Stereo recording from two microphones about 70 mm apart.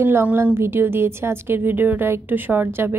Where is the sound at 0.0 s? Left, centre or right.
Right.